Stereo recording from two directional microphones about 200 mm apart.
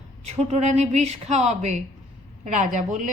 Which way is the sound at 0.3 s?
35° right (ahead or behind).